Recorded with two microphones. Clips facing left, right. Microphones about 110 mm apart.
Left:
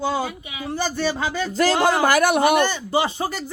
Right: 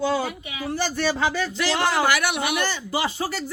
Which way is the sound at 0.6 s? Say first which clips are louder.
Left 1 dB; 20° left (ahead or behind).